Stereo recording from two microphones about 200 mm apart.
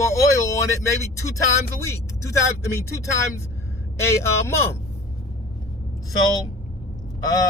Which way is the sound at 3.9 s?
15° left (ahead or behind).